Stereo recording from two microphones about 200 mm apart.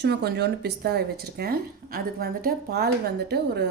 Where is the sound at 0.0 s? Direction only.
55° right (ahead or behind).